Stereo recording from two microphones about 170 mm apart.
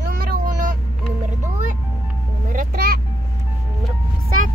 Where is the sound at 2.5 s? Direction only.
55° right (ahead or behind).